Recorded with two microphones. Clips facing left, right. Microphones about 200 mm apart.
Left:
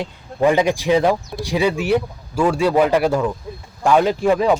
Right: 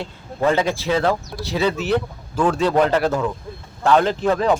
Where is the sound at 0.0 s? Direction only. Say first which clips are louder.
Left 3 dB; 15° left (ahead or behind).